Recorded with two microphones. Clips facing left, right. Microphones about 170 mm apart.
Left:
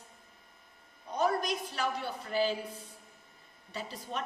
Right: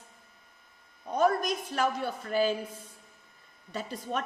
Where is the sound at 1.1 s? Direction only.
50° right (ahead or behind).